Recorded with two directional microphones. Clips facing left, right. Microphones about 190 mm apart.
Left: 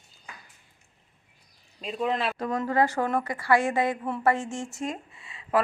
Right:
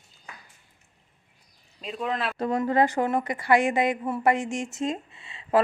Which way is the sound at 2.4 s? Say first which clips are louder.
Right 5 dB; 25° right (ahead or behind).